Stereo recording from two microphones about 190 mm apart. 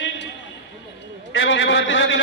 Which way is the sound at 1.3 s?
75° left (ahead or behind).